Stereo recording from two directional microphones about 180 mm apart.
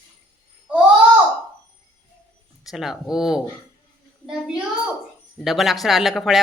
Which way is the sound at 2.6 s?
Centre (ahead or behind).